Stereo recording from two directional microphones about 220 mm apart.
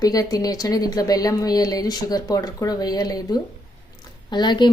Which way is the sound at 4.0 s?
20° left (ahead or behind).